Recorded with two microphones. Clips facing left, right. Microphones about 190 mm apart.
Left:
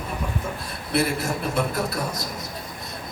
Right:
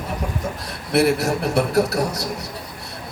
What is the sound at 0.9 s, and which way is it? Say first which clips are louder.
A man's voice: right 6 dB; 75° right (ahead or behind).